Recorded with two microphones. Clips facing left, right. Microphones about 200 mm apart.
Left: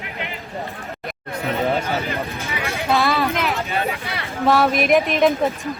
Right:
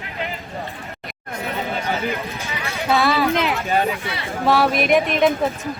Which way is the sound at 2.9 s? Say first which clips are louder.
Right 1 dB; centre (ahead or behind).